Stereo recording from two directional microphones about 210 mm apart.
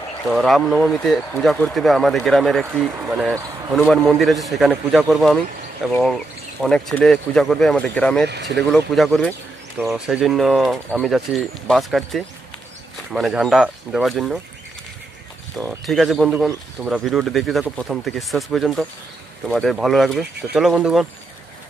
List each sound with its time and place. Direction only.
0.3 s speech: centre (ahead or behind)
8.3 s speech: 55° right (ahead or behind)
8.5 s speech: centre (ahead or behind)
15.5 s speech: centre (ahead or behind)